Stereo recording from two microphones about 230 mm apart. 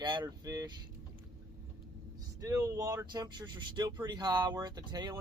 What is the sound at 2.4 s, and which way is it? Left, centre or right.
Speech, centre.